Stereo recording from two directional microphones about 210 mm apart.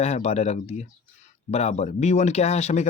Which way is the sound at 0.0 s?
30° left (ahead or behind).